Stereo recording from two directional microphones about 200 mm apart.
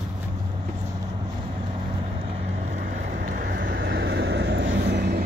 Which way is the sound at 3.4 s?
60° right (ahead or behind).